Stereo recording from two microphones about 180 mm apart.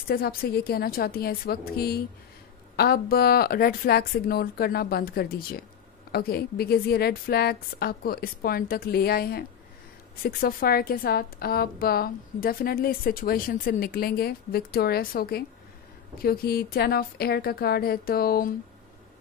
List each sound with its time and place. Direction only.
0.1 s a woman's voice: 55° left (ahead or behind)